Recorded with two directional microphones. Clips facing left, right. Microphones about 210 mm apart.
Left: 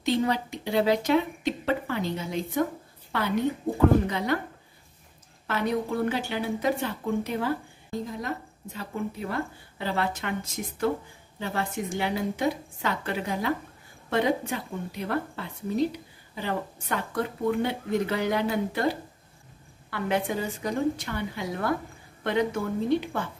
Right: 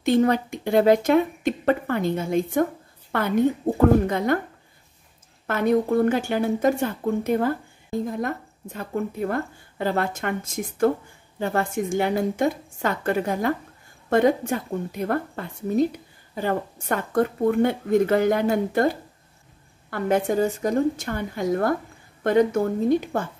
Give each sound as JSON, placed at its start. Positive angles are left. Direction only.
{"t": 0.0, "sound": "speech", "side_deg": -50}
{"t": 5.5, "sound": "speech", "side_deg": -50}